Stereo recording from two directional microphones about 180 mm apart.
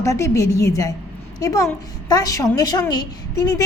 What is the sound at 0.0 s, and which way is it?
A woman's voice, 15° left (ahead or behind).